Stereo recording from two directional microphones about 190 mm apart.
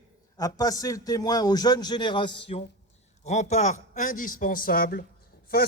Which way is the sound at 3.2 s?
35° left (ahead or behind).